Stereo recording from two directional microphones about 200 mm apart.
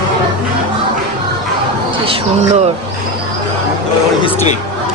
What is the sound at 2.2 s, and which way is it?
Speech, 35° right (ahead or behind).